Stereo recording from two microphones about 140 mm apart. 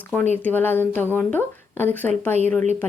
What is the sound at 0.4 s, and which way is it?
A woman's voice, 15° left (ahead or behind).